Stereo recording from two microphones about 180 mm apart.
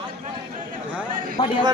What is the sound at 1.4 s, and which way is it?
Speech, 30° left (ahead or behind).